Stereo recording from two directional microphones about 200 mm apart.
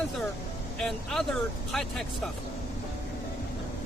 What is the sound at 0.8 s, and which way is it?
Speech, centre (ahead or behind).